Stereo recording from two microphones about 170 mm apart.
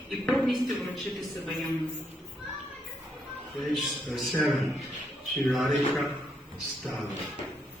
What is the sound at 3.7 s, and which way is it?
A woman's voice, centre (ahead or behind).